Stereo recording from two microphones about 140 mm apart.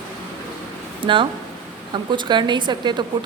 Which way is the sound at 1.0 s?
35° right (ahead or behind).